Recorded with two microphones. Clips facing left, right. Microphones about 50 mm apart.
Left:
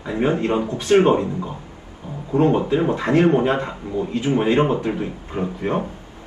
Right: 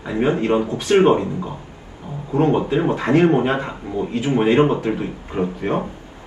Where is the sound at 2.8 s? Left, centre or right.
Centre.